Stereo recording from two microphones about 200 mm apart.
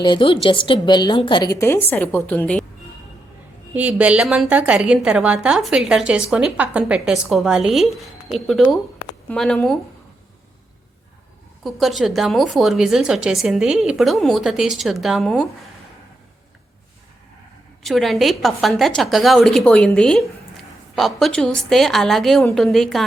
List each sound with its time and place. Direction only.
0.0 s a woman's voice: 25° left (ahead or behind); by 2.6 s 5° left (ahead or behind)
3.8 s a woman's voice: 5° right (ahead or behind)
11.6 s a woman's voice: centre (ahead or behind)
17.8 s a woman's voice: centre (ahead or behind)